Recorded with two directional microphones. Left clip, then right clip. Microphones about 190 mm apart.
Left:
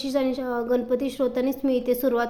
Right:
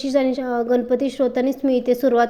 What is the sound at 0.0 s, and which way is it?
Speech, 20° right (ahead or behind).